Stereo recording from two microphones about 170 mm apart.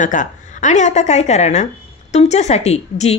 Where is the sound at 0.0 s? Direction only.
50° left (ahead or behind).